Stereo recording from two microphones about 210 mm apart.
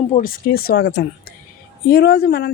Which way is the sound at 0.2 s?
45° left (ahead or behind).